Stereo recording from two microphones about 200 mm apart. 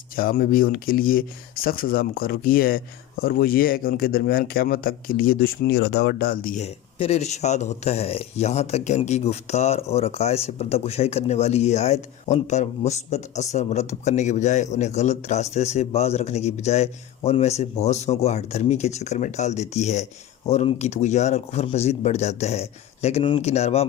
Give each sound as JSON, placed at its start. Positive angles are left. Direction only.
{"t": 0.2, "sound": "speech", "side_deg": 45}